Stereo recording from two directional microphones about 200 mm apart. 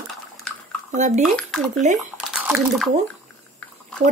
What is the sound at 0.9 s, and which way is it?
Speech, 35° right (ahead or behind).